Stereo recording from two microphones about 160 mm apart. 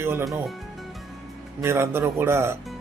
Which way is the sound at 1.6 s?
15° right (ahead or behind).